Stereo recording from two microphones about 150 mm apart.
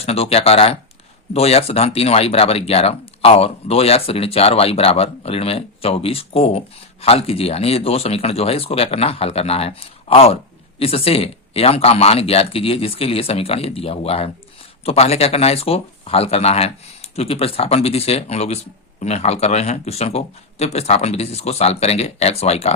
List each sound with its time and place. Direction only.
0.0 s speech: 40° left (ahead or behind)